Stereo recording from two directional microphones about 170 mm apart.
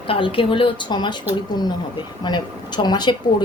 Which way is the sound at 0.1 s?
30° left (ahead or behind).